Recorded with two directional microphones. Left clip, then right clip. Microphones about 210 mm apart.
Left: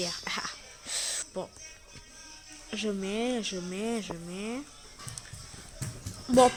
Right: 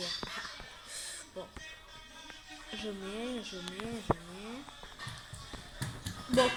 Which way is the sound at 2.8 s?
60° left (ahead or behind).